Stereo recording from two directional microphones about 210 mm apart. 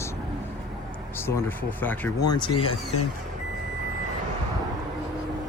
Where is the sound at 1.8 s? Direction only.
10° left (ahead or behind).